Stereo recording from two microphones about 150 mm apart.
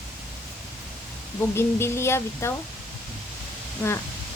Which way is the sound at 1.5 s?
15° left (ahead or behind).